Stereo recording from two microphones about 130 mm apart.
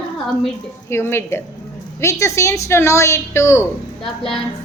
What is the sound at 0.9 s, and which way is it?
A woman's voice, 20° left (ahead or behind).